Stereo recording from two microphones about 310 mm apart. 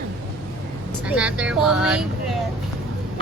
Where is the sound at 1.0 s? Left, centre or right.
Centre.